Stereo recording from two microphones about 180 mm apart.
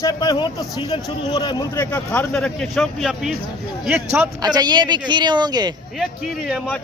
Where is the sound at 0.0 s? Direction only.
20° left (ahead or behind).